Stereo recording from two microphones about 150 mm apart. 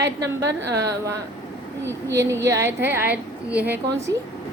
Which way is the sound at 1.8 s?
20° right (ahead or behind).